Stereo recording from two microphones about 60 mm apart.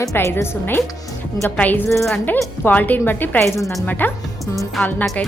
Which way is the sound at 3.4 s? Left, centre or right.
Left.